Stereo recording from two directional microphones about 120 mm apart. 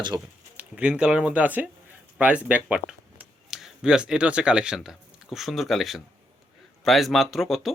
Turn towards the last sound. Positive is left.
turn(degrees=0)  # may be behind; listen again after turning